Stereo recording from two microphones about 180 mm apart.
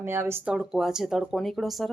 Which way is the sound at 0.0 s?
15° right (ahead or behind).